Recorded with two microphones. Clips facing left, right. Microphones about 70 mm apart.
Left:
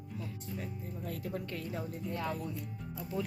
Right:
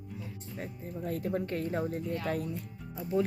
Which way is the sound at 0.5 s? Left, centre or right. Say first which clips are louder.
Right 4 dB; right.